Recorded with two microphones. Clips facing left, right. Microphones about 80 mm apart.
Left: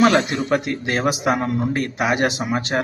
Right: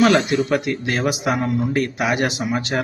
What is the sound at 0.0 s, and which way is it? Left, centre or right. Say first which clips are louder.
Speech: right 1 dB; left.